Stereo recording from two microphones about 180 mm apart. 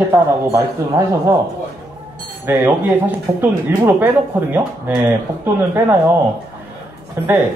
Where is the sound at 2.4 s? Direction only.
10° right (ahead or behind).